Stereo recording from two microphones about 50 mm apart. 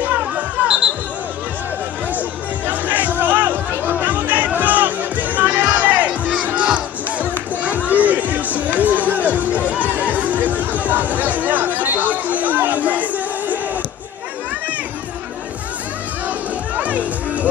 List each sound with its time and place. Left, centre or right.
0.2 s music: centre
2.1 s music: right
16.7 s music: right